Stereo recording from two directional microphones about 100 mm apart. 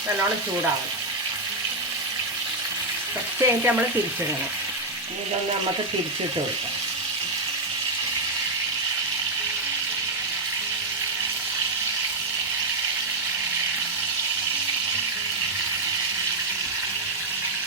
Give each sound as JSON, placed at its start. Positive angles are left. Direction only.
{"t": 3.4, "sound": "frying", "side_deg": -25}